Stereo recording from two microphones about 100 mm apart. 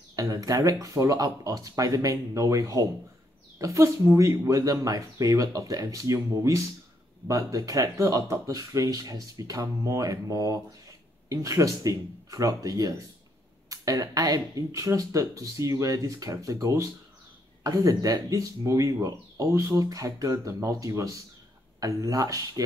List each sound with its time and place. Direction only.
0.1 s speech: 35° right (ahead or behind)